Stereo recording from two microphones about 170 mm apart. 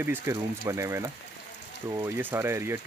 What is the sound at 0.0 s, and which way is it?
Speech, 15° right (ahead or behind).